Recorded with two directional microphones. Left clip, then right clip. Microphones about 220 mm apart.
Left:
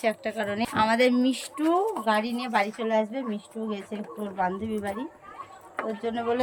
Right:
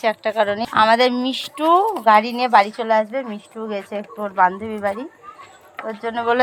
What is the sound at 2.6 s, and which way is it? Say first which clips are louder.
A woman's voice: right 9 dB; 35° right (ahead or behind).